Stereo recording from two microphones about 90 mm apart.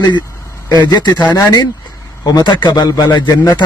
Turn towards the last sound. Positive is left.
turn(degrees=55)  # may be behind; listen again after turning